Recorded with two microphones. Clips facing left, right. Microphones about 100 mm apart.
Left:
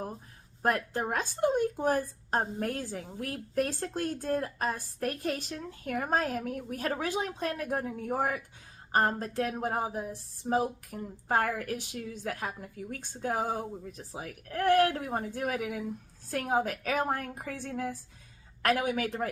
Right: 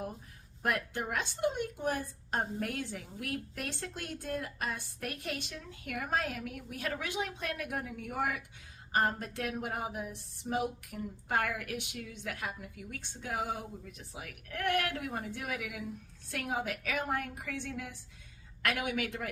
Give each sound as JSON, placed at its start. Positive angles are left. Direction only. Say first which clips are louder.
{"t": 0.6, "sound": "a woman's voice", "louder": "left 5 dB", "side_deg": 35}